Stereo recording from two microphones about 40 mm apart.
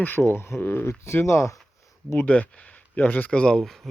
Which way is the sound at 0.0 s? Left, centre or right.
Left.